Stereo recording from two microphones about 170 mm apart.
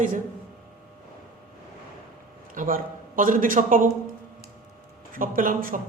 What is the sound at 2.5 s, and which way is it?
A man's voice, 55° right (ahead or behind).